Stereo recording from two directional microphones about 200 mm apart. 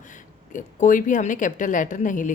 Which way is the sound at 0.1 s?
40° left (ahead or behind).